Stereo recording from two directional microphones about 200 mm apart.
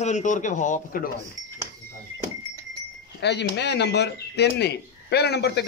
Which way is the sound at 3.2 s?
60° left (ahead or behind).